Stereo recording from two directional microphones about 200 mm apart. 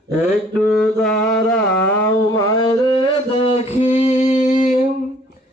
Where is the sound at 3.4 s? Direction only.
30° left (ahead or behind).